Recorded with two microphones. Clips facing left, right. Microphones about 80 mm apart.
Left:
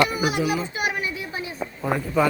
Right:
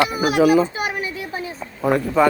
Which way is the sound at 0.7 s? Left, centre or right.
Right.